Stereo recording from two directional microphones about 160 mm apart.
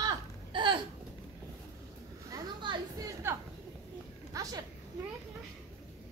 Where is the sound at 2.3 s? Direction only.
25° right (ahead or behind).